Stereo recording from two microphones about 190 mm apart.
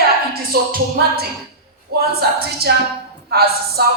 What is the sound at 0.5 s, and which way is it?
Speech, 55° right (ahead or behind).